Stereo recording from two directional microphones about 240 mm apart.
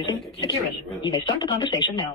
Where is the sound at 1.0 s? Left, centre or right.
Centre.